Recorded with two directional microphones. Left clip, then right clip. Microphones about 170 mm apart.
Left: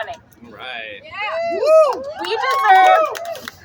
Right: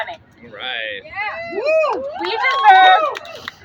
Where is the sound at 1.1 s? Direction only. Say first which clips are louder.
Left 3 dB; 5° left (ahead or behind).